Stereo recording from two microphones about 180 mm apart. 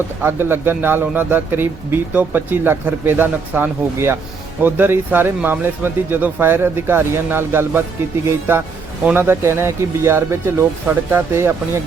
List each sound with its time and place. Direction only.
0.2 s speech: 10° right (ahead or behind)